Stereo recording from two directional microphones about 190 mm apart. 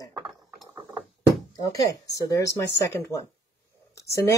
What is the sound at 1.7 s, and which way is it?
Speech, 15° left (ahead or behind).